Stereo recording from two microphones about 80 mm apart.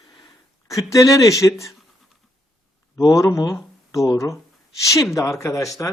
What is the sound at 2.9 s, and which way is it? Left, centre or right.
Speech, left.